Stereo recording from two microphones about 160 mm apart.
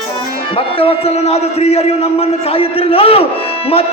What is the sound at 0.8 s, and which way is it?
A man's voice, 35° left (ahead or behind).